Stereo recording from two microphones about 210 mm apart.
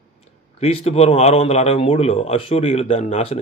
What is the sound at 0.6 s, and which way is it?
Speech, 30° left (ahead or behind).